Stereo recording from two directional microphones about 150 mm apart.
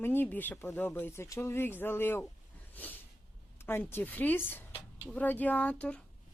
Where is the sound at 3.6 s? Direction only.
15° left (ahead or behind).